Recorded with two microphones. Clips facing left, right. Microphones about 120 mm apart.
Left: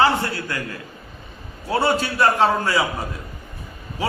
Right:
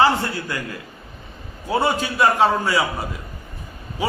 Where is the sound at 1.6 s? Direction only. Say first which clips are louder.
Even; 5° right (ahead or behind).